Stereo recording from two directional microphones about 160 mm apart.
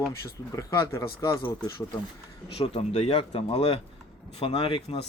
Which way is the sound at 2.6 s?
35° left (ahead or behind).